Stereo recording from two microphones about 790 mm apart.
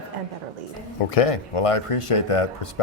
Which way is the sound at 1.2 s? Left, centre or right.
Left.